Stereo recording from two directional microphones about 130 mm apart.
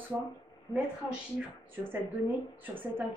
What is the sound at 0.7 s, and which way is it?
Speech, 20° left (ahead or behind).